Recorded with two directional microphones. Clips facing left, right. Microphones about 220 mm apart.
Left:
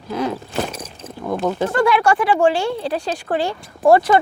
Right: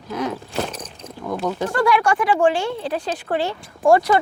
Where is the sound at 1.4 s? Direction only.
25° left (ahead or behind).